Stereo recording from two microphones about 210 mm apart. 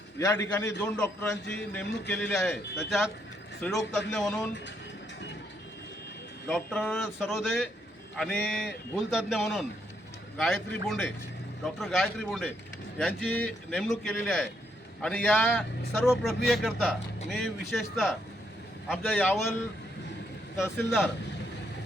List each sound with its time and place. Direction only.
0.2 s a man's voice: 10° left (ahead or behind)
6.5 s a man's voice: 5° left (ahead or behind)
19.0 s a man's voice: 10° left (ahead or behind)
20.7 s a man's voice: 5° left (ahead or behind)